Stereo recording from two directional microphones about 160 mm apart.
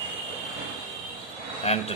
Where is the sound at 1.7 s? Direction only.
40° left (ahead or behind).